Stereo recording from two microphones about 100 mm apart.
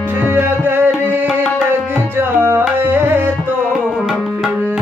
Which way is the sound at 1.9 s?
20° right (ahead or behind).